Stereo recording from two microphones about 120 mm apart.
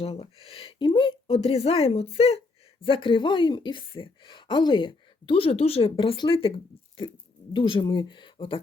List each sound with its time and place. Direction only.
0.0 s speech: 55° left (ahead or behind)
1.4 s a woman's voice: 55° left (ahead or behind)
7.5 s a woman's voice: 45° left (ahead or behind)